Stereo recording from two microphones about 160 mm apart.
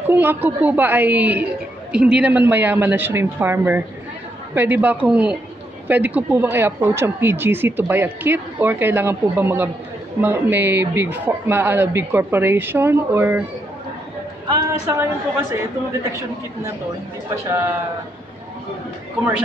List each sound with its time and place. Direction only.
0.1 s speech: 10° right (ahead or behind)
14.5 s speech: 15° right (ahead or behind)
17.5 s speech: 20° right (ahead or behind)